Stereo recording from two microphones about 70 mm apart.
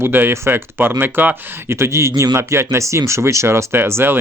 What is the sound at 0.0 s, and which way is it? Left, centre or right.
Speech, right.